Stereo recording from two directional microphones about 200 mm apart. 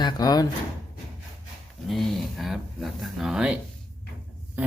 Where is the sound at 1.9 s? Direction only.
Centre (ahead or behind).